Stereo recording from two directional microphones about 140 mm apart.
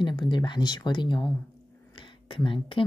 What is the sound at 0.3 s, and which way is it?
Speech, 30° left (ahead or behind).